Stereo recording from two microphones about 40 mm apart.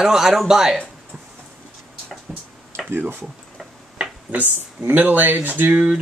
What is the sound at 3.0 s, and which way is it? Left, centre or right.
Speech, right.